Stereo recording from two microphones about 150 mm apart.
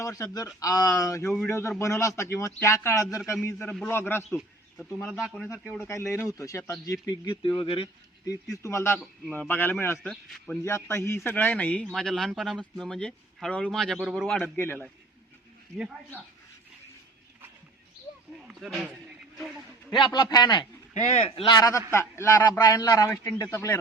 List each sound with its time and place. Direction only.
0.0 s speech: 25° left (ahead or behind)
3.7 s a man's voice: 10° left (ahead or behind)
4.4 s speech: centre (ahead or behind)
5.8 s speech: 20° left (ahead or behind); by 7.9 s 35° left (ahead or behind)
8.6 s a man's voice: 20° left (ahead or behind)
10.1 s speech: centre (ahead or behind)
10.6 s a man's voice: 20° left (ahead or behind)
18.4 s a sound: 5° right (ahead or behind)
20.3 s speech: 30° left (ahead or behind)
20.9 s speech: 50° left (ahead or behind)
21.6 s a man's voice: 20° left (ahead or behind)